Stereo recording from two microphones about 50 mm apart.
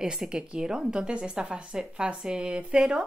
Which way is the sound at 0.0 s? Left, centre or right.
Centre.